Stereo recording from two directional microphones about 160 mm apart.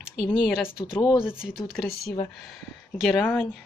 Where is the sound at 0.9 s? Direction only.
20° left (ahead or behind).